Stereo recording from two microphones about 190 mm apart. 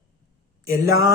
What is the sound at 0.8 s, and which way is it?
Music, 15° right (ahead or behind).